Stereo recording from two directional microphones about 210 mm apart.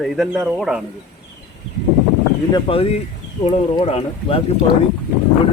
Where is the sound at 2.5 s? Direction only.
25° left (ahead or behind).